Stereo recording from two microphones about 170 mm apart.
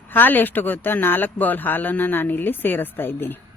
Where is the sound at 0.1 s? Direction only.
10° left (ahead or behind).